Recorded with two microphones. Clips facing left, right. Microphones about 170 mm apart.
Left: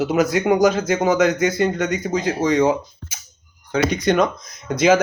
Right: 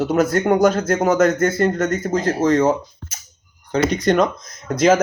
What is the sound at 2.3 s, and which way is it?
Speech, 10° left (ahead or behind).